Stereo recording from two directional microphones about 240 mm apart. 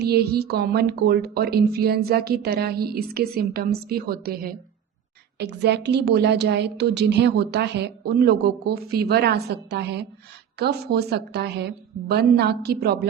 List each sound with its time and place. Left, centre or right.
0.0 s a woman's voice: right